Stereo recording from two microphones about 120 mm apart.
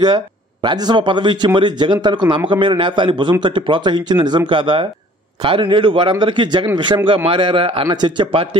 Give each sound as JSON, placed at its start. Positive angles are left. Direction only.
{"t": 0.0, "sound": "speech", "side_deg": -40}
{"t": 7.8, "sound": "speech", "side_deg": -35}